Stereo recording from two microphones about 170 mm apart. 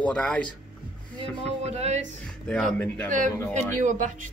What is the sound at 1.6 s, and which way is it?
Speech, 40° right (ahead or behind).